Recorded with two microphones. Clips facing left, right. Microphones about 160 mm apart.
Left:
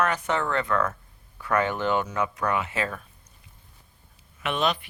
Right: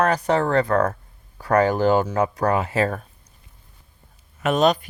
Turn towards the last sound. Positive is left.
turn(degrees=-40)  # may be behind; listen again after turning